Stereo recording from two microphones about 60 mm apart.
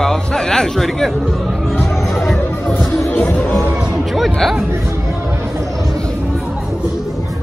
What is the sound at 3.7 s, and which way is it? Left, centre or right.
Speech, centre.